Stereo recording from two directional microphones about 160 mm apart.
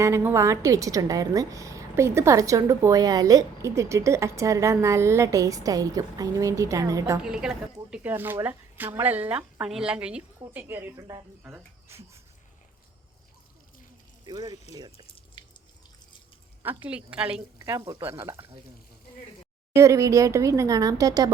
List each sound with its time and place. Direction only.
0.0 s a woman's voice: 15° right (ahead or behind)
7.2 s speech: 5° right (ahead or behind)
14.3 s a woman's voice: 25° right (ahead or behind)
15.0 s drip: 30° left (ahead or behind)
16.6 s speech: 10° right (ahead or behind)
17.6 s speech: 20° right (ahead or behind)
19.7 s a woman's voice: 20° right (ahead or behind)